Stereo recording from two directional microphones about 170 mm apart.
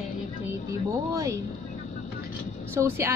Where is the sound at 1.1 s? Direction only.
20° right (ahead or behind).